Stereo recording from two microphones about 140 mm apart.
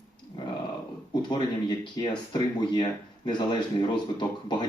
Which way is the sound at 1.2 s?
30° left (ahead or behind).